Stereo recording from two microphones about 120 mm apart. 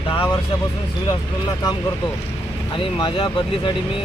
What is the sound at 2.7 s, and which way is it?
Speech, 45° left (ahead or behind).